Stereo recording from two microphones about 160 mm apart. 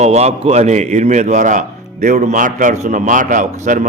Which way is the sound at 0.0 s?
40° right (ahead or behind).